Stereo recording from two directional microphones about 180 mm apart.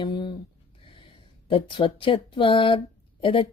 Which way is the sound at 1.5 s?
30° left (ahead or behind).